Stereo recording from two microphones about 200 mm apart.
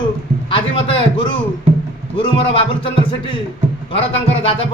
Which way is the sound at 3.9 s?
30° left (ahead or behind).